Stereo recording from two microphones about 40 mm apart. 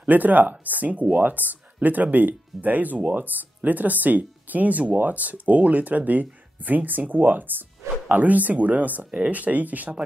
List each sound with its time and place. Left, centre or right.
0.0 s speech: right
9.0 s speech: right
9.3 s speech: right